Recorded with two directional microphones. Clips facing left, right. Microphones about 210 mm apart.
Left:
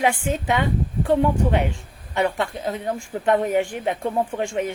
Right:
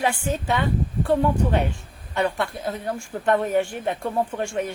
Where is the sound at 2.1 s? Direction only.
15° left (ahead or behind).